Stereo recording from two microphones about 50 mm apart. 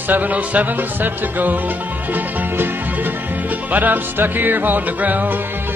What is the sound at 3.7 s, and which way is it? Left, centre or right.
Music, right.